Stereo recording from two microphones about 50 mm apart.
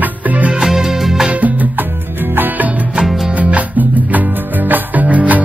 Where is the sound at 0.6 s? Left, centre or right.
Centre.